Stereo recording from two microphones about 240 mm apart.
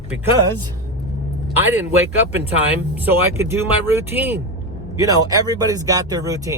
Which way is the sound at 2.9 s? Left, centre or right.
Centre.